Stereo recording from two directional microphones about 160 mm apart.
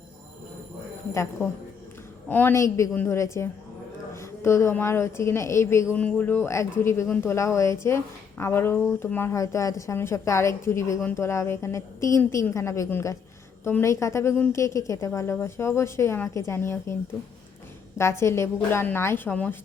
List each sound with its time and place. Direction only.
2.3 s a woman's voice: 15° left (ahead or behind)
17.9 s a woman's voice: 15° left (ahead or behind)